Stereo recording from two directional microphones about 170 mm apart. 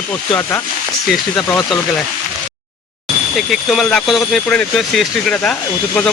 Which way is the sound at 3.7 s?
5° left (ahead or behind).